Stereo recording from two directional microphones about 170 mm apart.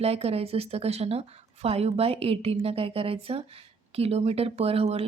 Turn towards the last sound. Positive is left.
turn(degrees=-35)  # may be behind; listen again after turning